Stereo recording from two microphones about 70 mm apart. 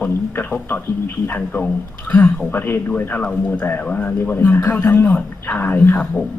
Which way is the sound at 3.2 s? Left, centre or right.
Centre.